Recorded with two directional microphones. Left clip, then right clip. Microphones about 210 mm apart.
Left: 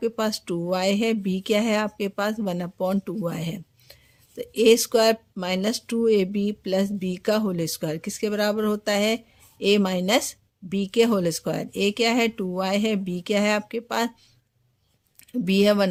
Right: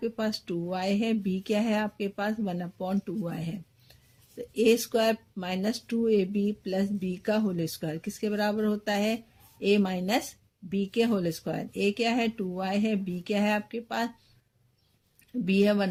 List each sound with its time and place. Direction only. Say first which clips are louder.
0.0 s speech: left 6 dB; 40° left (ahead or behind)
15.3 s speech: left 5 dB; 40° left (ahead or behind)